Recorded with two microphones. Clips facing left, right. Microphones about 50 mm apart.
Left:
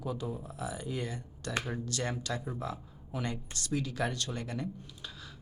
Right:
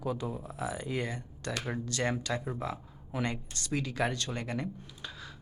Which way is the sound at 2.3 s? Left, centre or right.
Centre.